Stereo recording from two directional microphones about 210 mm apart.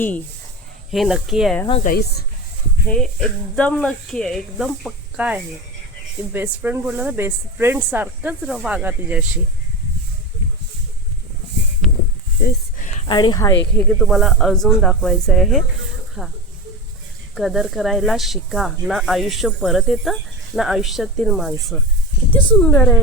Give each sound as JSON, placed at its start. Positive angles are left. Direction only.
{"t": 0.9, "sound": "speech", "side_deg": 0}
{"t": 1.8, "sound": "speech", "side_deg": 45}
{"t": 2.9, "sound": "speech", "side_deg": 5}
{"t": 12.5, "sound": "a sound", "side_deg": 35}
{"t": 13.1, "sound": "speech", "side_deg": 20}
{"t": 13.7, "sound": "speech", "side_deg": 5}
{"t": 17.3, "sound": "speech", "side_deg": 0}